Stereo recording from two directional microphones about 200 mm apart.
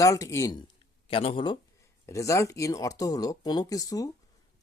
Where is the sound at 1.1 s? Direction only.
25° left (ahead or behind).